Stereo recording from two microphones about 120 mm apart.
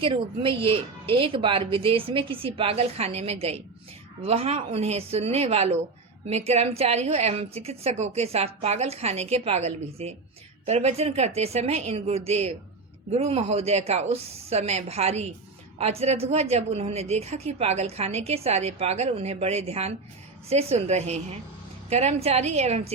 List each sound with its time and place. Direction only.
0.0 s a woman's voice: 45° right (ahead or behind)